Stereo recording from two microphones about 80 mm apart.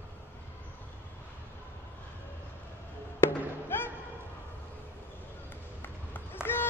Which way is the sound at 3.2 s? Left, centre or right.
Left.